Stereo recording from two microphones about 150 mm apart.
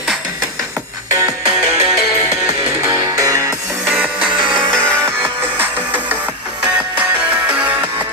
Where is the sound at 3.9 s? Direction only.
10° right (ahead or behind).